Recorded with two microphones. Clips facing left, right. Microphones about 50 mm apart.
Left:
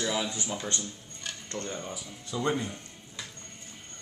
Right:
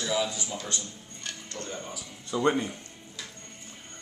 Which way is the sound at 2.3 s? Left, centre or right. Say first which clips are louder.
Right 4 dB; centre.